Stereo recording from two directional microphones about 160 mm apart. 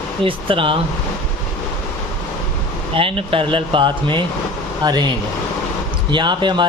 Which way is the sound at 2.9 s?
35° right (ahead or behind).